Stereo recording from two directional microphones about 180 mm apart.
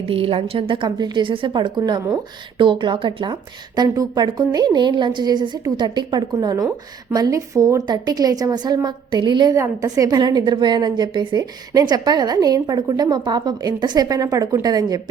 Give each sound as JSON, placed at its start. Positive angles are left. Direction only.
{"t": 0.1, "sound": "a woman's voice", "side_deg": -30}